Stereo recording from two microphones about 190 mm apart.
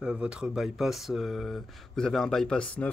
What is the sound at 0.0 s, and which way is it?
Speech, 5° right (ahead or behind).